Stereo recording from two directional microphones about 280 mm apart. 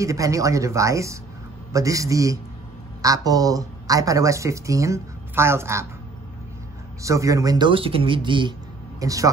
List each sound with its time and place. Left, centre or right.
0.0 s speech: centre
7.0 s speech: centre